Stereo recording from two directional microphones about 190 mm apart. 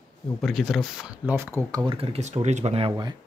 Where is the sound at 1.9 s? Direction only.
30° right (ahead or behind).